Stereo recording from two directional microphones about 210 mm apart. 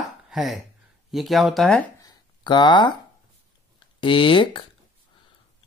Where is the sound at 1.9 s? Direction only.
20° left (ahead or behind).